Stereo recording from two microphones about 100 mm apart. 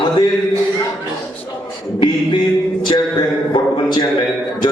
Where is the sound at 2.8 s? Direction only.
45° left (ahead or behind).